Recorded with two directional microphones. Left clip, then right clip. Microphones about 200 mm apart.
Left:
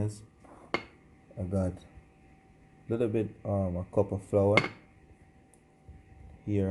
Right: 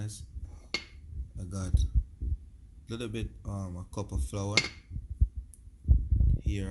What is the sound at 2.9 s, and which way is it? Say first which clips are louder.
Speech: left 9 dB; centre (ahead or behind).